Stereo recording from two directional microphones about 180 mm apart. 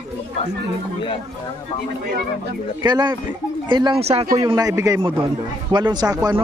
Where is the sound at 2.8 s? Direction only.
25° right (ahead or behind).